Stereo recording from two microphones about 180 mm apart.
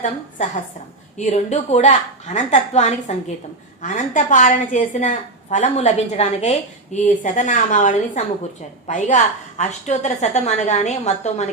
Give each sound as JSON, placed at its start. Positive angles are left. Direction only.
{"t": 1.1, "sound": "a woman's voice", "side_deg": 40}